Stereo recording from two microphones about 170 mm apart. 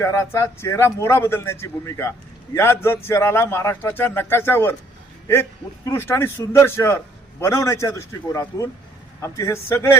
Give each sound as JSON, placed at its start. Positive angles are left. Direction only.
{"t": 0.0, "sound": "a man's voice", "side_deg": 15}